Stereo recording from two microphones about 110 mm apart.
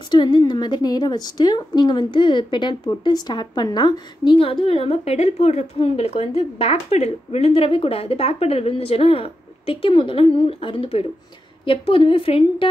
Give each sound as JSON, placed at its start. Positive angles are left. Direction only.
{"t": 0.1, "sound": "a woman's voice", "side_deg": 45}
{"t": 4.6, "sound": "a woman's voice", "side_deg": 60}